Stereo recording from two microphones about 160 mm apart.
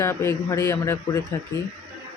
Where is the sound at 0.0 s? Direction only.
15° left (ahead or behind).